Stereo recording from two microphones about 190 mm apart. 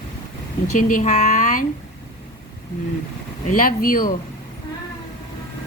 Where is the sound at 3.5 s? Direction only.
45° left (ahead or behind).